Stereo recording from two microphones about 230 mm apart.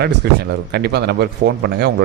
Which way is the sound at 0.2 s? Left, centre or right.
Right.